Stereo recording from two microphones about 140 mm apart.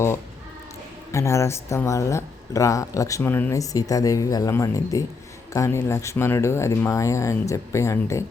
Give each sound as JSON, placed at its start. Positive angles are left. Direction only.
{"t": 1.1, "sound": "speech", "side_deg": 20}